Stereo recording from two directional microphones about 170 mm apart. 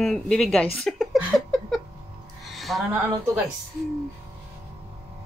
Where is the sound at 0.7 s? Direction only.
5° left (ahead or behind).